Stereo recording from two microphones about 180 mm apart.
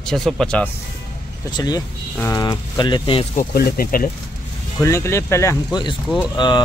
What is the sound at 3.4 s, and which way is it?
Speech, 60° left (ahead or behind).